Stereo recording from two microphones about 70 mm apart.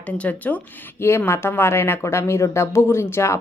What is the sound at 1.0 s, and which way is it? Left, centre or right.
Speech, left.